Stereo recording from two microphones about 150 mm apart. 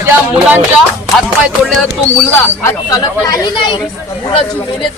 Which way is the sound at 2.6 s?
25° left (ahead or behind).